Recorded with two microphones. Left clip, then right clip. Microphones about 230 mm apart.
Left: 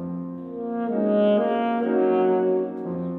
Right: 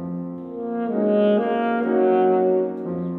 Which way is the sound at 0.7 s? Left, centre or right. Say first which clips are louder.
Right 2 dB; right.